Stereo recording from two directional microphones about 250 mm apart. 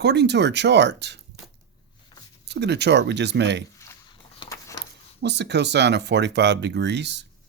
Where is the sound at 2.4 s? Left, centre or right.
Right.